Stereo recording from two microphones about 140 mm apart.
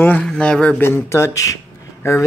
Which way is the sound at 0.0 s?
10° left (ahead or behind).